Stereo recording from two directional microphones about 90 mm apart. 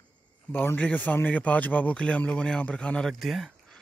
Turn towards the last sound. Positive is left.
turn(degrees=0)  # may be behind; listen again after turning